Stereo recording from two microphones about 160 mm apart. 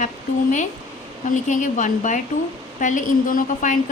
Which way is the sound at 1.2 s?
50° left (ahead or behind).